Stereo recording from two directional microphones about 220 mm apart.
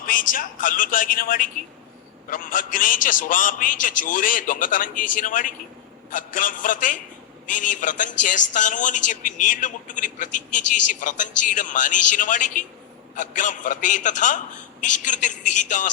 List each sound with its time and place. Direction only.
0.0 s a woman's voice: 40° left (ahead or behind)